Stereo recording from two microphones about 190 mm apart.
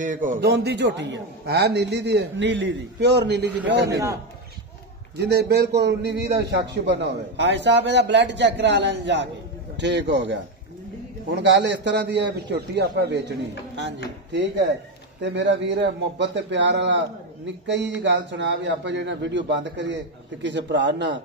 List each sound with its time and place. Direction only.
0.0 s speech: 45° right (ahead or behind)
0.4 s a man's voice: 60° right (ahead or behind)
3.9 s a man's voice: 15° right (ahead or behind)
5.1 s a man's voice: 60° right (ahead or behind)
14.3 s a man's voice: 65° right (ahead or behind)